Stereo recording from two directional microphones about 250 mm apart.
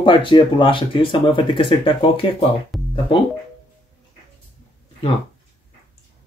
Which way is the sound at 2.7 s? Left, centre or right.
Centre.